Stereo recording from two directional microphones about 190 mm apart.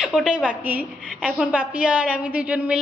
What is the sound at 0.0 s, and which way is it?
A woman's voice, 5° right (ahead or behind).